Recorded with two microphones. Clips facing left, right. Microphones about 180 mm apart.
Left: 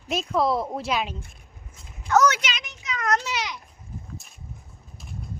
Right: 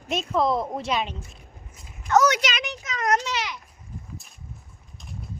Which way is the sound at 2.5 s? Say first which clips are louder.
Right 8 dB; 70° right (ahead or behind).